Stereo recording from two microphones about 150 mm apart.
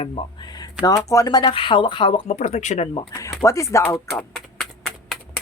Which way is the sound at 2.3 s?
50° left (ahead or behind).